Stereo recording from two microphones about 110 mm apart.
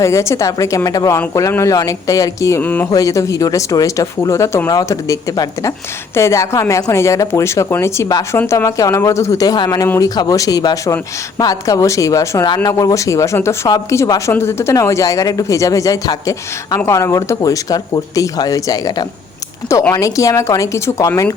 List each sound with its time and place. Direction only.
0.0 s speech: 25° left (ahead or behind)
2.6 s speech: 15° left (ahead or behind)
2.9 s speech: 30° left (ahead or behind)